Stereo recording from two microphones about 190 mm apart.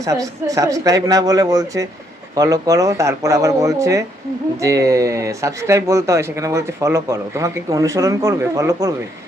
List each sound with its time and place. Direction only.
0.0 s speech: 15° right (ahead or behind)